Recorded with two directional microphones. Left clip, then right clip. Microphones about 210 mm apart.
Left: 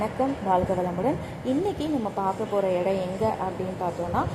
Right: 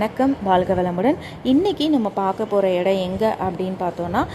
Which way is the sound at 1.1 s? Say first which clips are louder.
Right 7 dB; 20° right (ahead or behind).